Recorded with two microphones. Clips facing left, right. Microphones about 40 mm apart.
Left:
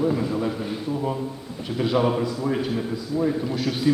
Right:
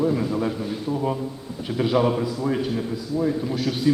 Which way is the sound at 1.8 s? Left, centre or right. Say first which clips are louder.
Right 1 dB; centre.